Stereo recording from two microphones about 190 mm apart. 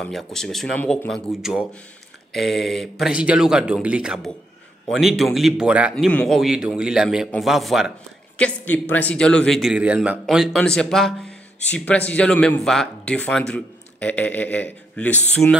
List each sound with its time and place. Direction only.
0.0 s a man's voice: centre (ahead or behind)